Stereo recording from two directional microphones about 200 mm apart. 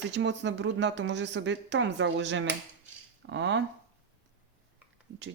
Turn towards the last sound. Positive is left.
turn(degrees=-65)  # may be behind; listen again after turning